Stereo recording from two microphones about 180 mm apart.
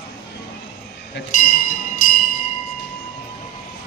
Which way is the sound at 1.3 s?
45° left (ahead or behind).